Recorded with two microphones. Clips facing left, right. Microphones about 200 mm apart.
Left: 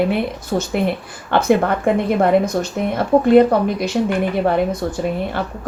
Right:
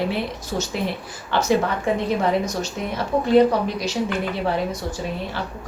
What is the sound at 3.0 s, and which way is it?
A woman's voice, 55° left (ahead or behind).